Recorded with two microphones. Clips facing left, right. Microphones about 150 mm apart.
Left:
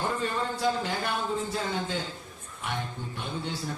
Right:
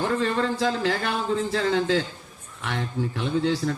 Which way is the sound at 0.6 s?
90° right.